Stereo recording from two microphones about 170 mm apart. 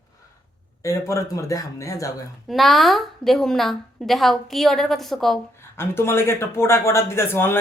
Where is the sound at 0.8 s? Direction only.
15° left (ahead or behind).